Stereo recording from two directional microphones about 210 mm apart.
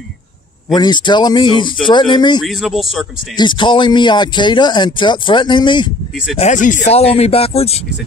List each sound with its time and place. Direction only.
0.7 s speech: 20° left (ahead or behind)
2.4 s speech: centre (ahead or behind)
3.3 s speech: 20° left (ahead or behind)
6.3 s speech: 35° left (ahead or behind)